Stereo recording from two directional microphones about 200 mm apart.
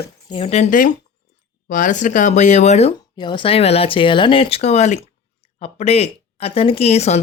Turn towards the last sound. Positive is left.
turn(degrees=30)  # may be behind; listen again after turning